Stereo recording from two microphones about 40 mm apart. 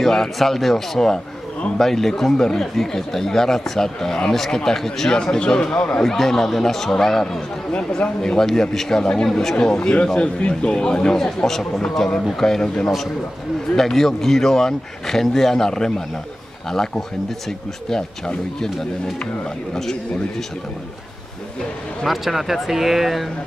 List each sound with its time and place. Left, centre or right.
0.0 s speech: centre; by 6.0 s left
6.0 s speech: centre
10.0 s speech: left
11.1 s speech: centre
13.7 s speech: centre
19.7 s speech: centre
22.0 s speech: centre